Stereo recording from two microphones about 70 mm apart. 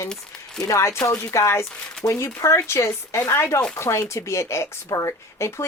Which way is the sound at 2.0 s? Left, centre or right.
Left.